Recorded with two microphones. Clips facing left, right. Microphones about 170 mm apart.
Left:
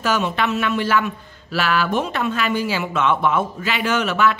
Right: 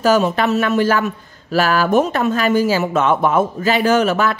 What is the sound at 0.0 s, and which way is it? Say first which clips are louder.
A man's voice: right 6 dB; 40° right (ahead or behind).